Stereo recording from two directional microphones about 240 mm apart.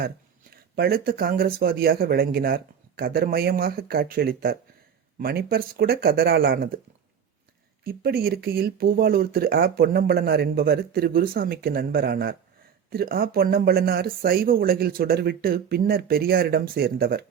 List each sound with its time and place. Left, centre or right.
0.8 s speech: right
7.9 s speech: right